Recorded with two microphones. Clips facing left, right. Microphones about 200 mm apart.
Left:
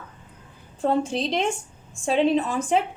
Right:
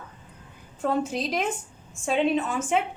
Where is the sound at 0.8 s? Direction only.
30° left (ahead or behind).